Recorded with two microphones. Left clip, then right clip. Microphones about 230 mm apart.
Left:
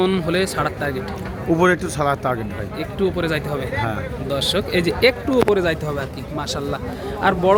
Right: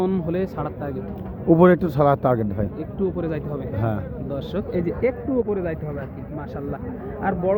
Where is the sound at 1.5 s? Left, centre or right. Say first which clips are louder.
Right 1 dB; right.